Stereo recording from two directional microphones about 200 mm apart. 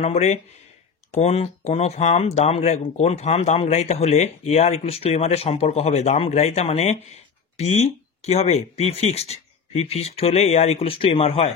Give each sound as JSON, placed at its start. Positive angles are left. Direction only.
{"t": 0.0, "sound": "speech", "side_deg": 35}